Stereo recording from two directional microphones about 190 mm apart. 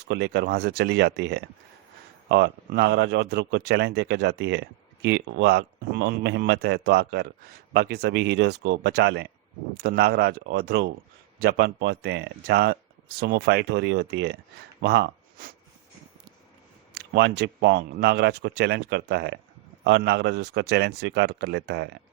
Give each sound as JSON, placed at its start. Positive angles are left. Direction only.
{"t": 0.1, "sound": "speech", "side_deg": -65}
{"t": 16.9, "sound": "speech", "side_deg": -65}